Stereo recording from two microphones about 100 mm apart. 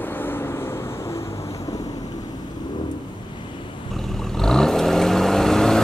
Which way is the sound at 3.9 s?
5° left (ahead or behind).